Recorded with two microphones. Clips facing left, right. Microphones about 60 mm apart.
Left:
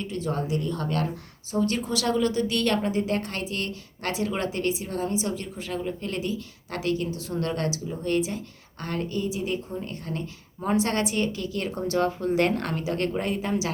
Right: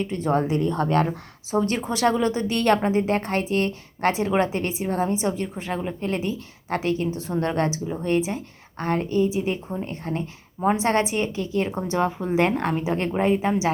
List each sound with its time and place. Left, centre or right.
0.0 s speech: right